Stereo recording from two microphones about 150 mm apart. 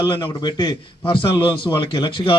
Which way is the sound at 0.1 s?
30° left (ahead or behind).